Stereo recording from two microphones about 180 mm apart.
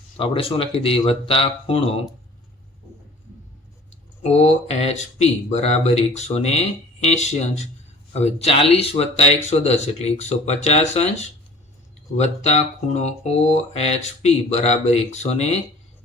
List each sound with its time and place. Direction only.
0.2 s speech: 30° left (ahead or behind)
4.2 s speech: 35° left (ahead or behind)